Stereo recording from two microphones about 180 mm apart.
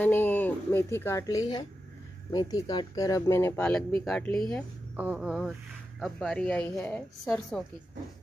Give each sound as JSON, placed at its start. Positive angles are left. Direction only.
{"t": 0.0, "sound": "a woman's voice", "side_deg": 10}
{"t": 4.9, "sound": "a woman's voice", "side_deg": -10}